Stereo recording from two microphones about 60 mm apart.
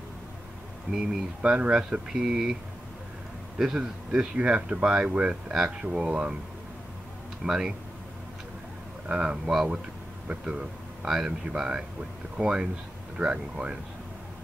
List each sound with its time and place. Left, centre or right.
1.4 s speech: centre
3.5 s a man's voice: centre
4.1 s speech: centre
5.5 s speech: centre
7.4 s speech: centre
9.1 s speech: centre